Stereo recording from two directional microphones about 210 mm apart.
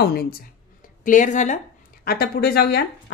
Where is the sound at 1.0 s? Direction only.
35° left (ahead or behind).